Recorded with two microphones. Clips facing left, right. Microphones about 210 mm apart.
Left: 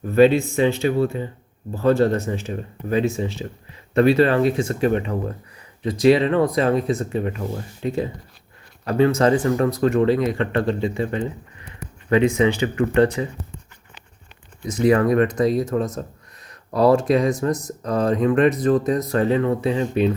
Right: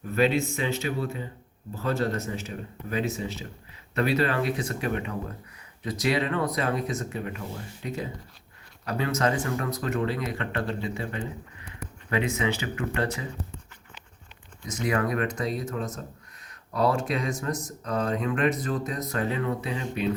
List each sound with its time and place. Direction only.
0.1 s speech: 30° left (ahead or behind)
14.7 s speech: 30° left (ahead or behind)